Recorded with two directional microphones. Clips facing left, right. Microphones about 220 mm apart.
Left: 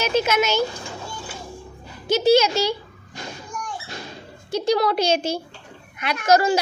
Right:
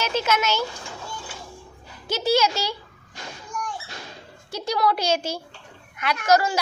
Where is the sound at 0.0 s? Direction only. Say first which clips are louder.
Left 4 dB; 15° left (ahead or behind).